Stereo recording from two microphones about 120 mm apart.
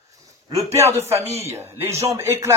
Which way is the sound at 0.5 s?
25° right (ahead or behind).